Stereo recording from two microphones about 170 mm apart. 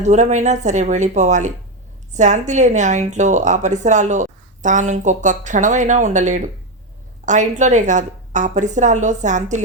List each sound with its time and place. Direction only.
0.0 s a woman's voice: 45° right (ahead or behind)